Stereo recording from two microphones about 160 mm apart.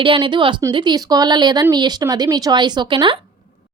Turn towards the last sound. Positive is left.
turn(degrees=-30)  # may be behind; listen again after turning